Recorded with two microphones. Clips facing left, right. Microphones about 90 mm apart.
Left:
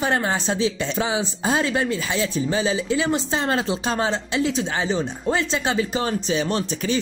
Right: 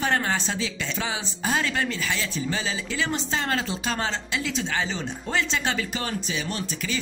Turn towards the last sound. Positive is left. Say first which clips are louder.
# left 7 dB
turn(degrees=30)  # may be behind; listen again after turning